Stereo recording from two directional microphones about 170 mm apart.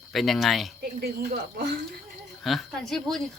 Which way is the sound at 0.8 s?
60° right (ahead or behind).